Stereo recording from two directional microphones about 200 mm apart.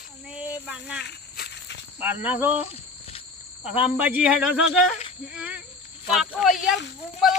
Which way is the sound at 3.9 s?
5° right (ahead or behind).